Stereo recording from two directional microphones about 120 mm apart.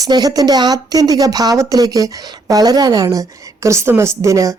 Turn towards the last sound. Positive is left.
turn(degrees=-25)  # may be behind; listen again after turning